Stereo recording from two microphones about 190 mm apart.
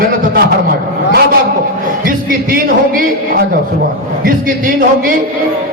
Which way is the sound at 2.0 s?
50° right (ahead or behind).